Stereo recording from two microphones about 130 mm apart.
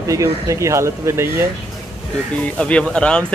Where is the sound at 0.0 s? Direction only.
25° right (ahead or behind).